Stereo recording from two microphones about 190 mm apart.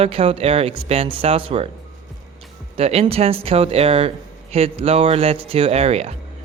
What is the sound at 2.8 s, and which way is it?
Speech, 30° right (ahead or behind).